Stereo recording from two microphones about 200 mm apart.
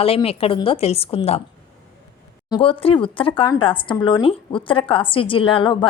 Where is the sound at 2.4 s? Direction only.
25° left (ahead or behind).